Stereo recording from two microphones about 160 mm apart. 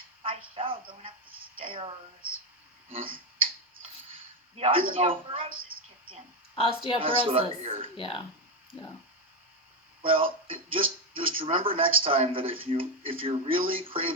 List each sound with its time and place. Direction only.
0.2 s a sound: 35° right (ahead or behind)
2.9 s speech: 35° right (ahead or behind)
4.5 s a woman's voice: 35° right (ahead or behind)
7.9 s speech: 35° left (ahead or behind)
10.0 s speech: 35° right (ahead or behind)